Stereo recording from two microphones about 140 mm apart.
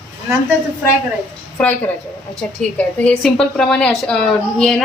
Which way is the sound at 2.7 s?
10° left (ahead or behind).